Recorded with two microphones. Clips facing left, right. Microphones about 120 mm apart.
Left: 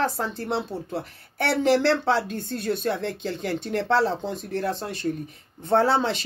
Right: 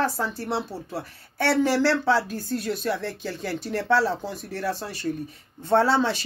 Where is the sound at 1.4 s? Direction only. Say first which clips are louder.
Left 1 dB; 25° left (ahead or behind).